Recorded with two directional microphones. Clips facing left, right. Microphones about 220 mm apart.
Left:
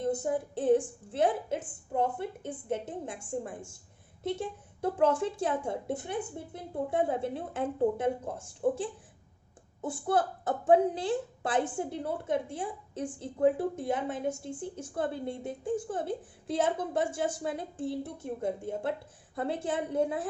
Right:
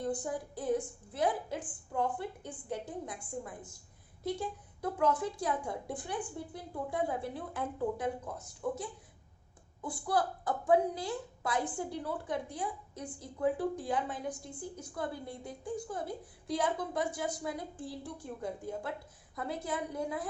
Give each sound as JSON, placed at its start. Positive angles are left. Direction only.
{"t": 0.0, "sound": "a woman's voice", "side_deg": 25}